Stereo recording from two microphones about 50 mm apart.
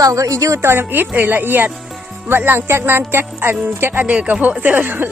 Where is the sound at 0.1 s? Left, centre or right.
Right.